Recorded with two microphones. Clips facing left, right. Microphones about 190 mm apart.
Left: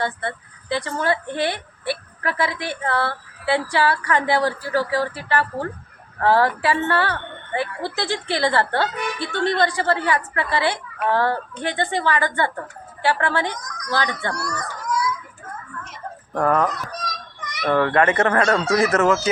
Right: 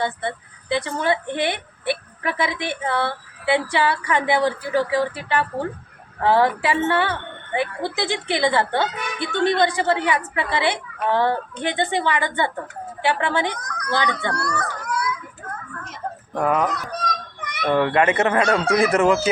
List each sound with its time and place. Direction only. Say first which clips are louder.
0.0 s a woman's voice: right 1 dB; 20° right (ahead or behind)
13.5 s a sound: right 2 dB; 60° right (ahead or behind)
13.9 s a woman's voice: right 1 dB; 20° right (ahead or behind)
14.3 s baby cry: right 3 dB; 60° right (ahead or behind)
16.4 s speech: left 1 dB; 10° right (ahead or behind)
17.1 s children playing: right 5 dB; 55° right (ahead or behind)
17.7 s speech: even; 15° right (ahead or behind)